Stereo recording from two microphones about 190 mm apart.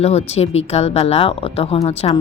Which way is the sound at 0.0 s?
35° left (ahead or behind).